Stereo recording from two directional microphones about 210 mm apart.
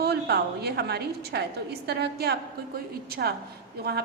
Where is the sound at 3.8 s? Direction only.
45° right (ahead or behind).